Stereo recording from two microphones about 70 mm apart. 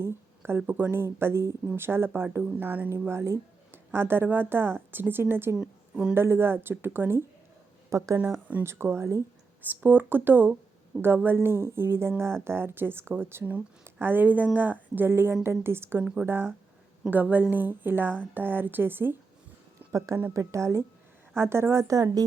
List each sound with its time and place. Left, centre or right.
0.0 s a woman's voice: right
3.1 s speech: right
5.5 s a woman's voice: centre
6.1 s speech: right
7.9 s speech: right
8.6 s speech: right
9.6 s a woman's voice: right
19.9 s a woman's voice: right